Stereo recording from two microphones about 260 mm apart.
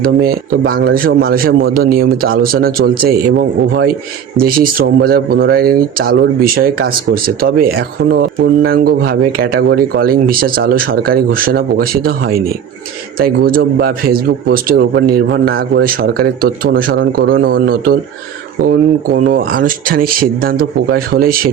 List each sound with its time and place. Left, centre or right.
0.0 s speech: right